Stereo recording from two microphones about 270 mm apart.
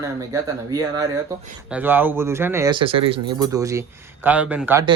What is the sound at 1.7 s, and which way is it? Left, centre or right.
Speech, centre.